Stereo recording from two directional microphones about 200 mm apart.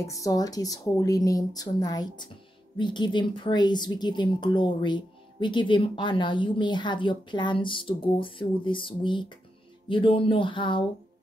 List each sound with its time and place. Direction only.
0.0 s speech: 15° left (ahead or behind)